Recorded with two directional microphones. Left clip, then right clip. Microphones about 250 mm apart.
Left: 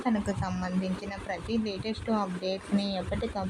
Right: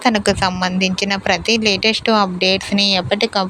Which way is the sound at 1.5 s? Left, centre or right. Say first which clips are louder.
Right 18 dB; right.